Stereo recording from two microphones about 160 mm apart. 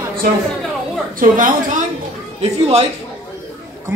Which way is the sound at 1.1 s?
55° right (ahead or behind).